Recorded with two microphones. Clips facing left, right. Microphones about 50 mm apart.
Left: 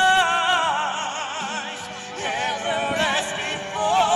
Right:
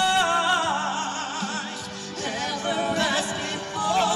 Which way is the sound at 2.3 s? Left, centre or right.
Left.